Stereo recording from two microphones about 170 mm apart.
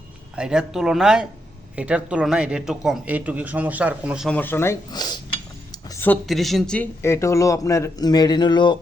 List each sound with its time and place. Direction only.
0.3 s speech: 5° right (ahead or behind)
4.3 s speech: 10° left (ahead or behind)
5.9 s a sound: 15° left (ahead or behind)
6.2 s speech: centre (ahead or behind)
7.0 s speech: 15° left (ahead or behind)